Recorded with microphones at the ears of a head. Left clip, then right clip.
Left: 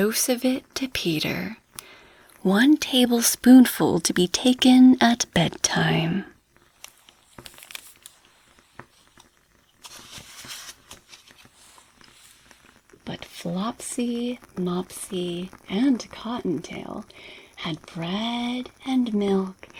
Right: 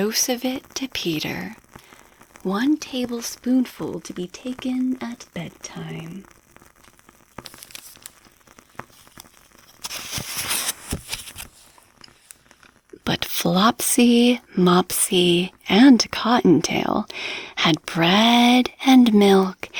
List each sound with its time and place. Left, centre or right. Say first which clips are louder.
0.3 s speech: left 1 dB; centre
2.8 s speech: left 7 dB; left
9.8 s a sound: right 12 dB; right
12.9 s speech: right 12 dB; right